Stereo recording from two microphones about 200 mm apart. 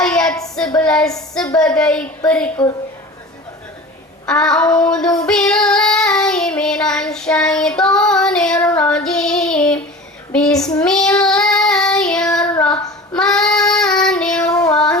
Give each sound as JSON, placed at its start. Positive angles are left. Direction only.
{"t": 0.0, "sound": "child singing", "side_deg": 5}
{"t": 0.3, "sound": "child singing", "side_deg": 15}
{"t": 0.8, "sound": "a woman's voice", "side_deg": 5}
{"t": 4.3, "sound": "a woman's voice", "side_deg": 5}
{"t": 4.7, "sound": "child singing", "side_deg": 5}
{"t": 10.3, "sound": "a woman's voice", "side_deg": 5}
{"t": 10.8, "sound": "child singing", "side_deg": 5}